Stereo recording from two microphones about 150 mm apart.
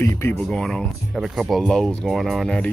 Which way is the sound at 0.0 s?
15° left (ahead or behind).